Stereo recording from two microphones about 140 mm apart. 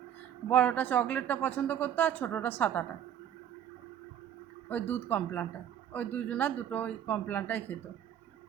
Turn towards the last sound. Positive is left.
turn(degrees=10)  # may be behind; listen again after turning